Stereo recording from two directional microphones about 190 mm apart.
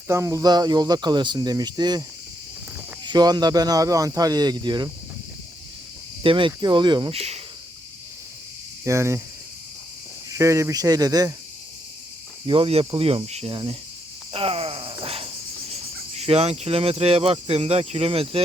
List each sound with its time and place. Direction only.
0.1 s speech: 15° right (ahead or behind)
6.2 s speech: 25° right (ahead or behind)
8.8 s speech: 15° right (ahead or behind)
10.3 s speech: 15° right (ahead or behind)
12.5 s cricket: 30° right (ahead or behind)
14.3 s groan: 30° right (ahead or behind)
15.0 s cricket: 30° right (ahead or behind)